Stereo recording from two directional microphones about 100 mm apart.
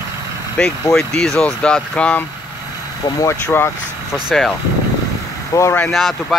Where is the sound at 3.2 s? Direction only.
25° left (ahead or behind).